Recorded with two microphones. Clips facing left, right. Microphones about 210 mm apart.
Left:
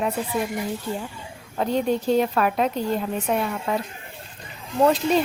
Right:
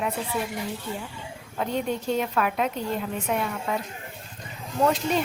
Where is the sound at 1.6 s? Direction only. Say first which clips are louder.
Left 5 dB; 35° left (ahead or behind).